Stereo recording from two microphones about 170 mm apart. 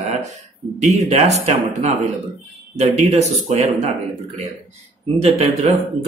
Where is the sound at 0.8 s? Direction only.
40° right (ahead or behind).